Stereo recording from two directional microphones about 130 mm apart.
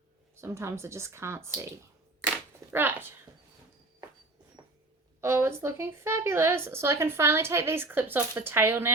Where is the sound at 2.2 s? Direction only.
15° right (ahead or behind).